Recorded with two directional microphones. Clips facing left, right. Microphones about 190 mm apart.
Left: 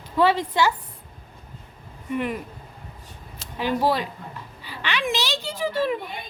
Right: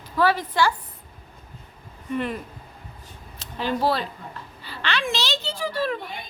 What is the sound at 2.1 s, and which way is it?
A child's voice, 10° left (ahead or behind).